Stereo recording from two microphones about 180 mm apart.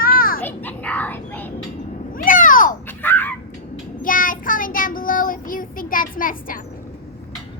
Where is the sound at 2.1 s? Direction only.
50° left (ahead or behind).